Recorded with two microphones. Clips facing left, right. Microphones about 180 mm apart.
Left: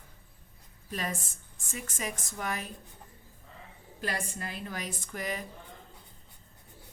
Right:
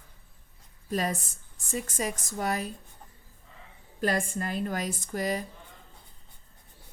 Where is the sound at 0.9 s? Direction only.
40° right (ahead or behind).